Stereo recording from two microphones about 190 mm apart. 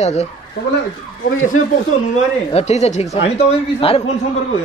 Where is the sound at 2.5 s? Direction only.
35° left (ahead or behind).